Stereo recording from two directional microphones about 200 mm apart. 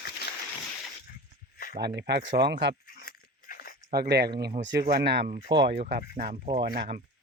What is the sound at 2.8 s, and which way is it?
Biting, 50° left (ahead or behind).